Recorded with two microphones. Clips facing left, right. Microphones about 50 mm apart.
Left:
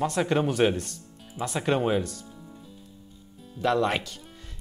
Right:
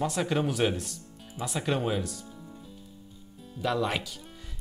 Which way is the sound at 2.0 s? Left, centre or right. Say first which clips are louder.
Even; centre.